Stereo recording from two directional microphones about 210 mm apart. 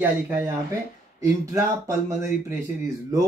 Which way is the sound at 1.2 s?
15° right (ahead or behind).